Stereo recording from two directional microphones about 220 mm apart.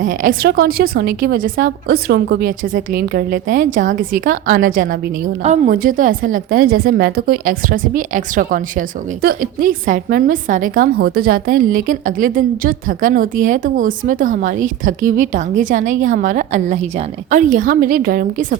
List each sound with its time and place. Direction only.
0.0 s a woman's voice: 35° right (ahead or behind)